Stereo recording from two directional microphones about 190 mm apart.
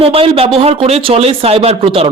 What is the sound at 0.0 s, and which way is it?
Speech, 30° right (ahead or behind).